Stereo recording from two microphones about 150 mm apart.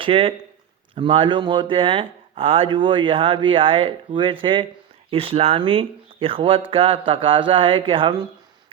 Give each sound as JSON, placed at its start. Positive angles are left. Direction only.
{"t": 0.0, "sound": "speech", "side_deg": -40}